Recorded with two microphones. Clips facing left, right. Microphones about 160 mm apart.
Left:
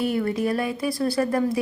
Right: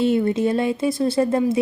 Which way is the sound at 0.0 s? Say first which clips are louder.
Right 5 dB; 25° right (ahead or behind).